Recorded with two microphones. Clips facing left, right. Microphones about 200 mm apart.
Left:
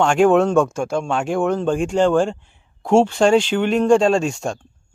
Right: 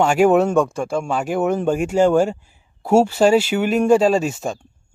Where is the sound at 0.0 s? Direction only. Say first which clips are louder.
Even; 5° right (ahead or behind).